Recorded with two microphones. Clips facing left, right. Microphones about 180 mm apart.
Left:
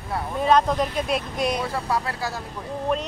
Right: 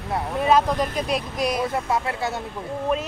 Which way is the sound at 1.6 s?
20° right (ahead or behind).